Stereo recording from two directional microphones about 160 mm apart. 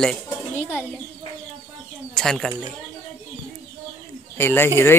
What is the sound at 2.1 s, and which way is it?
Speech, 5° left (ahead or behind).